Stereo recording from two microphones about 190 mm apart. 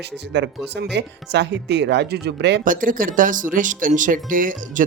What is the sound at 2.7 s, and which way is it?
Speech, 45° right (ahead or behind).